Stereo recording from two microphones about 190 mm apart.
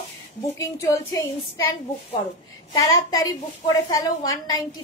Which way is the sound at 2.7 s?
20° left (ahead or behind).